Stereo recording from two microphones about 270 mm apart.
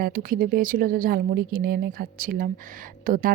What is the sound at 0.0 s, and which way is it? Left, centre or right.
Speech, right.